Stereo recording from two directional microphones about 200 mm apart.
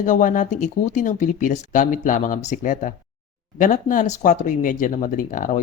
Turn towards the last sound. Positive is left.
turn(degrees=40)  # may be behind; listen again after turning